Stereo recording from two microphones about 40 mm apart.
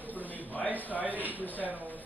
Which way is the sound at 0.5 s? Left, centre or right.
Left.